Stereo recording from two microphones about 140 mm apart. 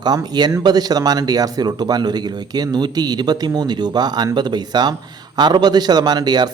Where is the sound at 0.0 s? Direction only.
30° right (ahead or behind).